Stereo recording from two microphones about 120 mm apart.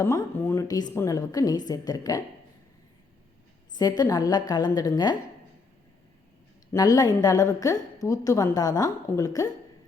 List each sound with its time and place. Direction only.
0.0 s a woman's voice: 25° left (ahead or behind)
0.7 s a woman's voice: 35° left (ahead or behind)
3.8 s a woman's voice: 35° left (ahead or behind)
6.7 s a woman's voice: 30° left (ahead or behind)